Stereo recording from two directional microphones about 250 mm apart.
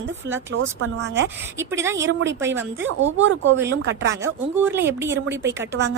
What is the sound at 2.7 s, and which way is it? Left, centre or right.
Speech, right.